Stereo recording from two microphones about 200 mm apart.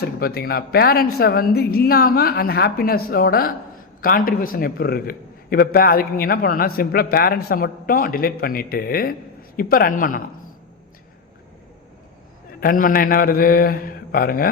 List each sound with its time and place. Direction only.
0.0 s a man's voice: 50° left (ahead or behind)
12.5 s a man's voice: 45° left (ahead or behind)